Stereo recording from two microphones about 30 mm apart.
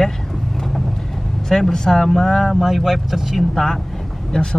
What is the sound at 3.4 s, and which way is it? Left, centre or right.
Speech, centre.